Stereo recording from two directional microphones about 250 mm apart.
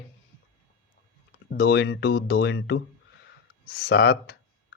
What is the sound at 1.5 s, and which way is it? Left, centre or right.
Speech, left.